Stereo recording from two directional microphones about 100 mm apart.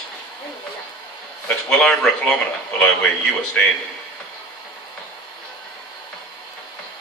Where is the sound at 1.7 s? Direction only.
5° left (ahead or behind).